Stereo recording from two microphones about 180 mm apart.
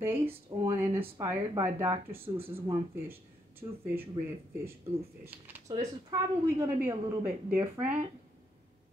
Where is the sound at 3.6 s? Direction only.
20° right (ahead or behind).